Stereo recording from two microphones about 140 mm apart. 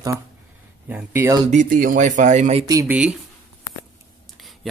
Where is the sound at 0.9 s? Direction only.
15° right (ahead or behind).